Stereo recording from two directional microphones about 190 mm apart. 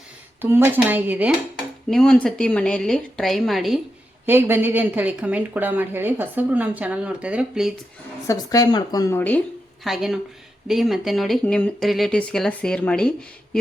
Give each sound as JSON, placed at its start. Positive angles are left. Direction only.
{"t": 0.4, "sound": "a woman's voice", "side_deg": -10}
{"t": 1.9, "sound": "speech", "side_deg": 0}
{"t": 4.3, "sound": "a woman's voice", "side_deg": -10}
{"t": 8.3, "sound": "a woman's voice", "side_deg": 20}
{"t": 9.8, "sound": "speech", "side_deg": 0}